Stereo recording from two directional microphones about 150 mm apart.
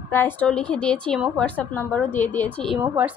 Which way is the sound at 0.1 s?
15° left (ahead or behind).